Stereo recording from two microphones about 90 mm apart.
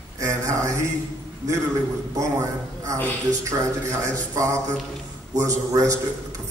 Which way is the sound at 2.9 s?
35° right (ahead or behind).